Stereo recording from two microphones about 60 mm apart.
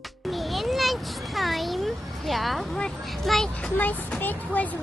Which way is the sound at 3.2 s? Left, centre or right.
Centre.